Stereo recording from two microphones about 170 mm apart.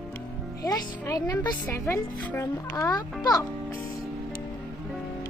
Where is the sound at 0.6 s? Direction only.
20° left (ahead or behind).